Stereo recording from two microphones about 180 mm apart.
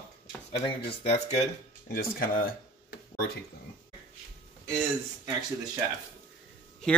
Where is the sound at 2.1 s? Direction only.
55° left (ahead or behind).